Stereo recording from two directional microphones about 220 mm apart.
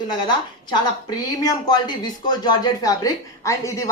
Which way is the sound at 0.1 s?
20° left (ahead or behind).